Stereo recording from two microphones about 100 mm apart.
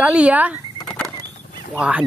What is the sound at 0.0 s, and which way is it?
Speech, 10° right (ahead or behind).